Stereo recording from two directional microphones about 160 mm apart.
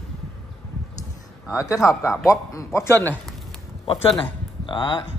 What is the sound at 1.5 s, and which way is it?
Speech, 20° left (ahead or behind).